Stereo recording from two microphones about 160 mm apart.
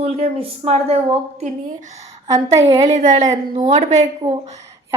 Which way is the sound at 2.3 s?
25° right (ahead or behind).